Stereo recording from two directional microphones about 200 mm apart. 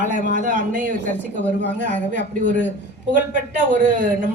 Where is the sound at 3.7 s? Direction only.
40° right (ahead or behind).